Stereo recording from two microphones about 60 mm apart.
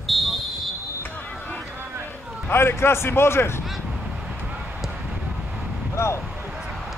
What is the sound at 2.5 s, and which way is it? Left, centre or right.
A man's voice, left.